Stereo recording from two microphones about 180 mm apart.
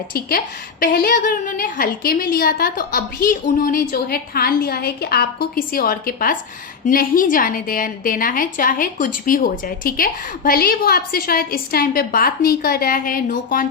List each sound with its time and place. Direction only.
0.1 s a woman's voice: 55° left (ahead or behind)